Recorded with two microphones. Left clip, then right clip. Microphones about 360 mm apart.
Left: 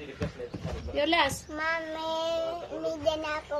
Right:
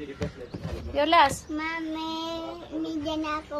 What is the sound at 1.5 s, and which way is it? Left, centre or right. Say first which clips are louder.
Speech: even; centre.